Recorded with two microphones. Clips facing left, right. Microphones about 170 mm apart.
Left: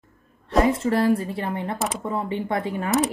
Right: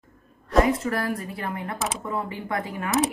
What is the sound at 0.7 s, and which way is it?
Speech, 25° left (ahead or behind).